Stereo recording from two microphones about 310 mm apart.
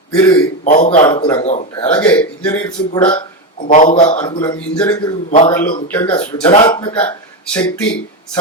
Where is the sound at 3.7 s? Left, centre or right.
Left.